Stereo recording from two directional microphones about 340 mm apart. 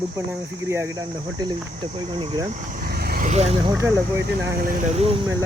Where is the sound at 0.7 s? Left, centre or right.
Centre.